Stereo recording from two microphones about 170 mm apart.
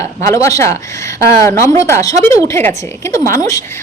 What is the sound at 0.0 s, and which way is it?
A woman's voice, 20° left (ahead or behind).